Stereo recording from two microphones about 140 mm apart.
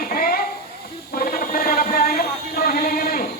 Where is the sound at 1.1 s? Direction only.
90° left.